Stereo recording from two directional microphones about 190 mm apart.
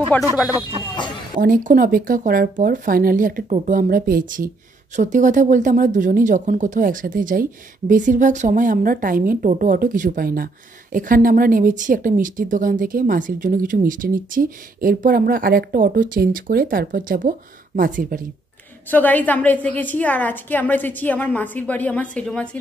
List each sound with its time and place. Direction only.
1.4 s a woman's voice: 45° right (ahead or behind)
18.9 s a woman's voice: 10° left (ahead or behind)